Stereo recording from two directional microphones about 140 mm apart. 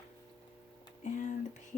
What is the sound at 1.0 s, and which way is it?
Speech, 65° left (ahead or behind).